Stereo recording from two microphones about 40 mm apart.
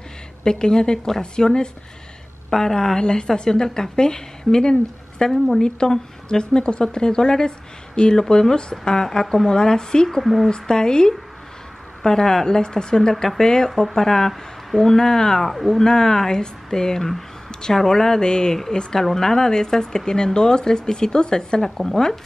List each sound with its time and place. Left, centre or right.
0.4 s a woman's voice: centre
10.2 s speech: centre
10.5 s a woman's voice: centre
15.8 s speech: centre
17.5 s a sound: centre
17.7 s a woman's voice: centre